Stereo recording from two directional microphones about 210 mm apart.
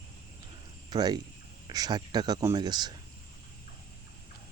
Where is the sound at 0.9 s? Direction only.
20° right (ahead or behind).